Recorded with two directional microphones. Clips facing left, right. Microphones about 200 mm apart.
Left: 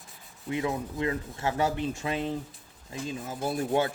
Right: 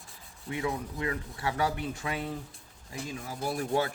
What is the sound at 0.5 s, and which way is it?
Speech, 20° left (ahead or behind).